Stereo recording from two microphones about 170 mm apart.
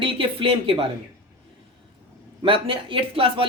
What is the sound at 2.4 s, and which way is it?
Speech, 30° right (ahead or behind).